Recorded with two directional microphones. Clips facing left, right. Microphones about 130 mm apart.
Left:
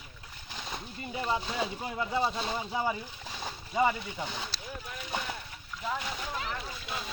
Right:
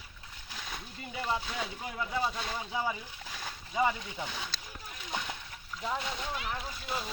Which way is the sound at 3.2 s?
20° left (ahead or behind).